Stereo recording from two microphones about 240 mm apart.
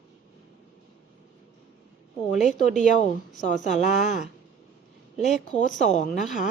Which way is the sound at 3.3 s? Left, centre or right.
Left.